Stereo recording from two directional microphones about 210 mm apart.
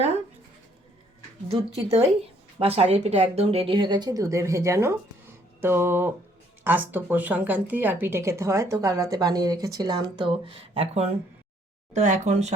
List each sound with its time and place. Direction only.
1.5 s speech: 30° right (ahead or behind)